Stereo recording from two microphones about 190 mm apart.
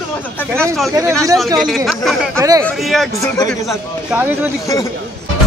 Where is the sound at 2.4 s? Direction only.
20° right (ahead or behind).